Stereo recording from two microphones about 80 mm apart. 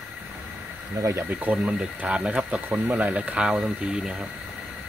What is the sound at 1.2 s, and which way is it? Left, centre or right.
Speech, right.